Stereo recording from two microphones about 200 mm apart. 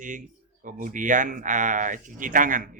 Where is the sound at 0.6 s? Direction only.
40° right (ahead or behind).